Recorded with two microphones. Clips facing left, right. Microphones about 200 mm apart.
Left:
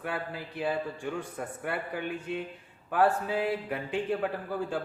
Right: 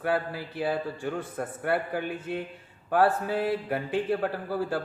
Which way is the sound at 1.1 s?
60° right (ahead or behind).